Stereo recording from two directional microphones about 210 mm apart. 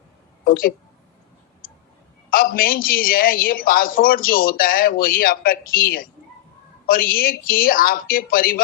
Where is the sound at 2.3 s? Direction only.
45° left (ahead or behind).